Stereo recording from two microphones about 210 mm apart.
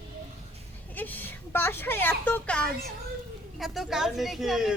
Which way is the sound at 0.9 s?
10° left (ahead or behind).